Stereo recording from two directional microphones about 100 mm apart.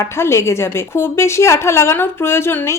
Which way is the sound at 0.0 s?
30° left (ahead or behind).